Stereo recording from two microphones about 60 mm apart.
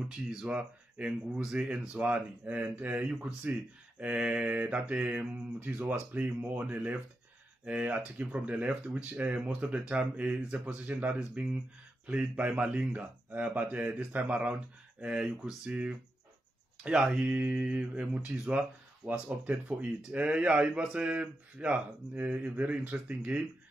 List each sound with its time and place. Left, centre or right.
0.3 s speech: centre
3.1 s speech: centre